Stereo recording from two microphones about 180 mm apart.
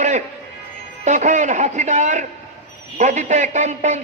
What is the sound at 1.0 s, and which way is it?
A man's voice, 40° right (ahead or behind).